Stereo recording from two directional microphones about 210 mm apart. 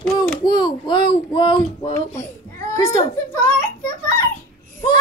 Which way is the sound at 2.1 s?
15° left (ahead or behind).